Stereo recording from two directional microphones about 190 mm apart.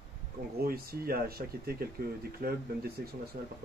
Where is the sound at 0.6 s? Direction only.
50° right (ahead or behind).